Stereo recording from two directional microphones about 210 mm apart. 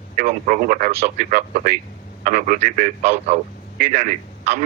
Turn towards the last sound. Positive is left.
turn(degrees=-35)  # may be behind; listen again after turning